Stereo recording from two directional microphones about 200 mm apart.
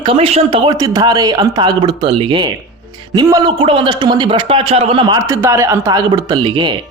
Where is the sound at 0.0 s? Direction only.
25° right (ahead or behind).